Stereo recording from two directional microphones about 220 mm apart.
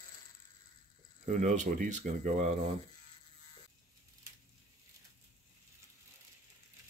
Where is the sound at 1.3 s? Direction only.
35° right (ahead or behind).